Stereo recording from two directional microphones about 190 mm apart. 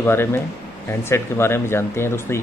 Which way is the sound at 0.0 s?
10° left (ahead or behind).